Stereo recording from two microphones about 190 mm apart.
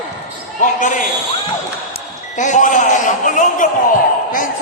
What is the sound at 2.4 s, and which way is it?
A man's voice, 40° left (ahead or behind).